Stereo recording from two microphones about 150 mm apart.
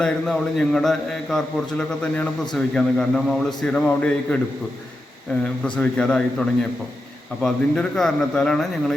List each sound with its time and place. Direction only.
0.0 s a man's voice: 5° left (ahead or behind)
5.6 s a man's voice: 10° left (ahead or behind)